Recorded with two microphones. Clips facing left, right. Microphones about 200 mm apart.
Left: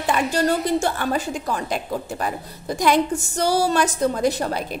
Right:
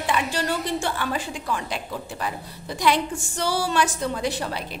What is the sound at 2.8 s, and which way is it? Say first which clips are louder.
A woman's voice: left 4 dB; 45° left (ahead or behind).